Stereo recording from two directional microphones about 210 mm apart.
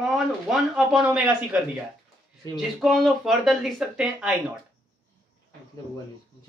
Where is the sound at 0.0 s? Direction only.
5° right (ahead or behind).